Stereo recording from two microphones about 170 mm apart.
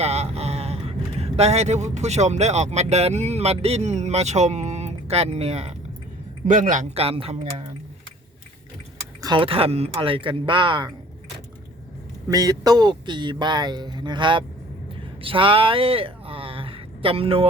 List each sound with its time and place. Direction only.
0.0 s speech: 40° right (ahead or behind)
6.5 s a man's voice: 50° right (ahead or behind)
9.2 s speech: 30° right (ahead or behind)
12.3 s speech: 20° right (ahead or behind)